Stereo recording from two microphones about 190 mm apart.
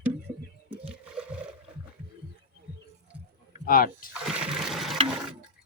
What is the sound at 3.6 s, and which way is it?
Speech, 50° left (ahead or behind).